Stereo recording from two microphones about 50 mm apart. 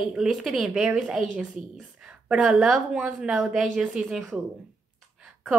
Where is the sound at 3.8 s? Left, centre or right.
Centre.